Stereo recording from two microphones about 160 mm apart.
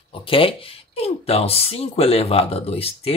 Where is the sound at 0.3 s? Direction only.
35° left (ahead or behind).